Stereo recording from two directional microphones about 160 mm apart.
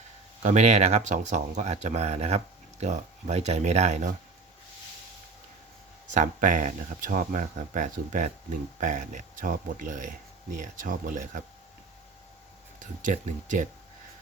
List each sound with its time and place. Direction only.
0.4 s speech: 45° right (ahead or behind)
6.1 s speech: 55° right (ahead or behind)
12.8 s speech: 55° right (ahead or behind)